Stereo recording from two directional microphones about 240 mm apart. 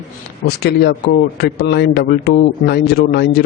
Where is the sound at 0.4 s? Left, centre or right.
Left.